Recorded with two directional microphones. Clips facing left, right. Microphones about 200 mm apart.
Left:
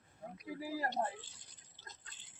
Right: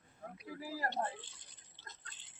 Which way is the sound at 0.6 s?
15° left (ahead or behind).